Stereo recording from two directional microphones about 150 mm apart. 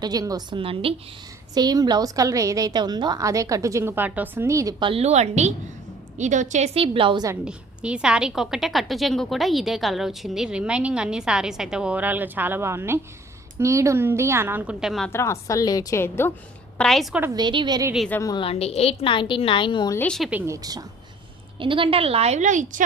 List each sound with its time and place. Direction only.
0.0 s a woman's voice: 25° right (ahead or behind)
1.5 s a woman's voice: 25° right (ahead or behind)
4.8 s a woman's voice: 40° right (ahead or behind)
7.4 s a woman's voice: 5° right (ahead or behind)
15.1 s a woman's voice: 20° left (ahead or behind)
16.7 s a woman's voice: 5° left (ahead or behind)
17.3 s a woman's voice: 30° right (ahead or behind)
18.1 s a woman's voice: 20° left (ahead or behind)
18.3 s a woman's voice: 40° left (ahead or behind)
20.0 s a woman's voice: 5° left (ahead or behind)
20.3 s a woman's voice: 20° right (ahead or behind)
21.6 s a woman's voice: 35° right (ahead or behind); by 22.8 s 55° right (ahead or behind)